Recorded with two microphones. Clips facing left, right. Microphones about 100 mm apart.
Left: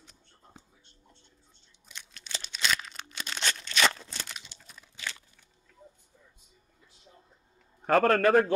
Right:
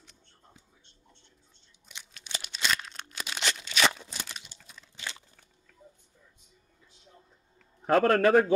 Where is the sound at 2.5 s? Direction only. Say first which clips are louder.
Even; centre (ahead or behind).